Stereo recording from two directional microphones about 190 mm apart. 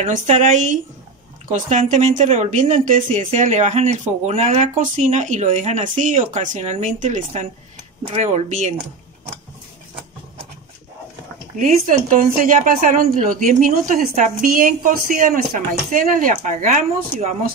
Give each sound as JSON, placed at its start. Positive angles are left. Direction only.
{"t": 0.0, "sound": "speech", "side_deg": -40}
{"t": 11.5, "sound": "speech", "side_deg": -45}